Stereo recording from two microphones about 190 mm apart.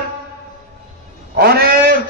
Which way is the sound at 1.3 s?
55° right (ahead or behind).